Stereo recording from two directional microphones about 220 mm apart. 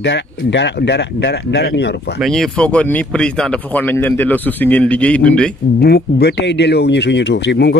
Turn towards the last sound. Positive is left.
turn(degrees=50)  # may be behind; listen again after turning